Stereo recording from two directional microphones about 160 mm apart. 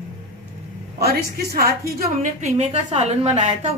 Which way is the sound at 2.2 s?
50° right (ahead or behind).